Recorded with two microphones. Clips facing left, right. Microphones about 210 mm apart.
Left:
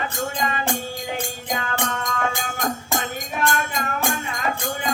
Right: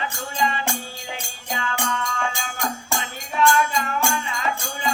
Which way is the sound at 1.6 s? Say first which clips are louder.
Right 3 dB; 45° left (ahead or behind).